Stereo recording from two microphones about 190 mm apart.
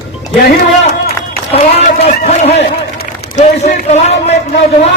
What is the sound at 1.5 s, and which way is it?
A man's voice, 35° left (ahead or behind).